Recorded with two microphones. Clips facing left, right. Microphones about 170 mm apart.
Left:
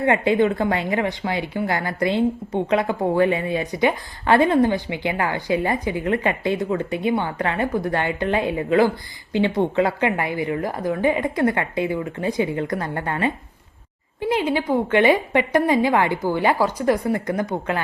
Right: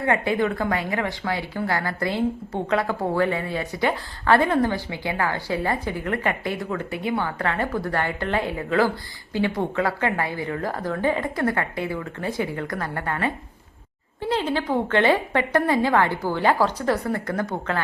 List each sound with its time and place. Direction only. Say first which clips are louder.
0.0 s a woman's voice: left 4 dB; 20° left (ahead or behind)